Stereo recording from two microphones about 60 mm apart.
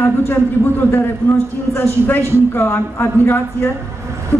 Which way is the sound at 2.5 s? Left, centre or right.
Left.